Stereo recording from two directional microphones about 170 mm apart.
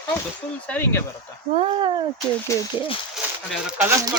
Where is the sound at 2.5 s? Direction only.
20° left (ahead or behind).